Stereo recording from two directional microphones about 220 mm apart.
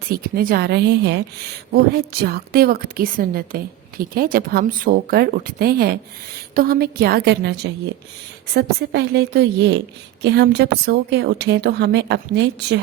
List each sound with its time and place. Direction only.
0.1 s a woman's voice: 45° right (ahead or behind)